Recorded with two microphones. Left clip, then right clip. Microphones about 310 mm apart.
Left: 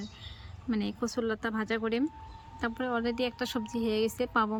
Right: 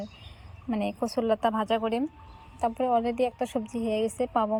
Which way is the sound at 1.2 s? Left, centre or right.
Right.